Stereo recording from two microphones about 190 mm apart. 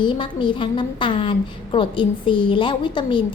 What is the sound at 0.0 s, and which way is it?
A woman's voice, 25° left (ahead or behind).